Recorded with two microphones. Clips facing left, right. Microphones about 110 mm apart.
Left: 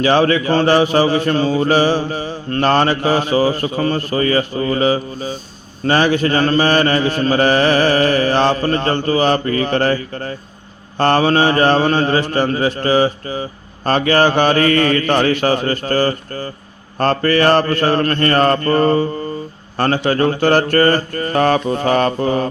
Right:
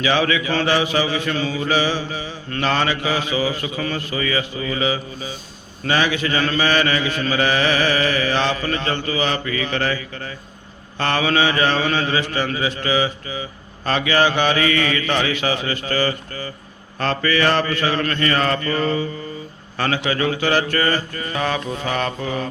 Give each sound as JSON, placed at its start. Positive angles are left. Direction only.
{"t": 0.0, "sound": "mantra", "side_deg": 45}